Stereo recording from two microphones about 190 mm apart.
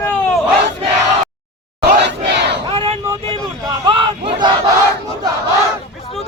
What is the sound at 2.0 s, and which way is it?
Battle cry, 65° right (ahead or behind).